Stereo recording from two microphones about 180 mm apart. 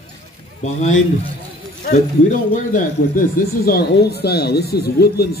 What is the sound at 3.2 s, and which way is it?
Speech, 50° left (ahead or behind).